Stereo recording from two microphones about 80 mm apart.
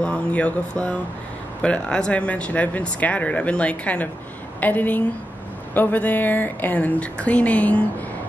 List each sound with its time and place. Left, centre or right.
0.0 s mantra: centre
1.6 s speech: centre